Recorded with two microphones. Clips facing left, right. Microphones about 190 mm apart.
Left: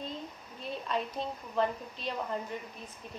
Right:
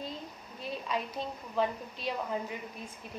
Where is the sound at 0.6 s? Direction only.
5° right (ahead or behind).